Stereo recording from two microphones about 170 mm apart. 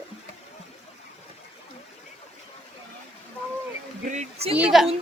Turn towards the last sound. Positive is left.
turn(degrees=0)  # may be behind; listen again after turning